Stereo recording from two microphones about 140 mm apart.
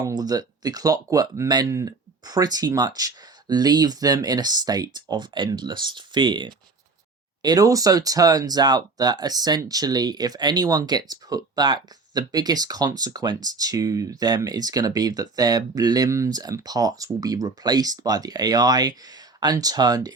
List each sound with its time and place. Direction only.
0.0 s speech: 30° right (ahead or behind)